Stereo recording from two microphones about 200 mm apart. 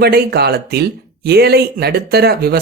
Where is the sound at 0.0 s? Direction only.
55° right (ahead or behind).